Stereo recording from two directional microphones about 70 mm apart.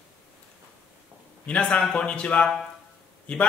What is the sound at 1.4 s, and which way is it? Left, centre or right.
A man's voice, centre.